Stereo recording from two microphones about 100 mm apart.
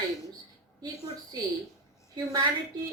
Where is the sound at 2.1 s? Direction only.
55° right (ahead or behind).